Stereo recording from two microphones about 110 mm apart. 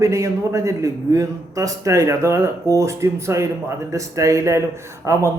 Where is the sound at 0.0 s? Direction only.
30° right (ahead or behind).